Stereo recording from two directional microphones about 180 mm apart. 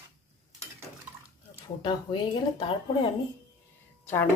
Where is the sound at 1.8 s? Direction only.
25° left (ahead or behind).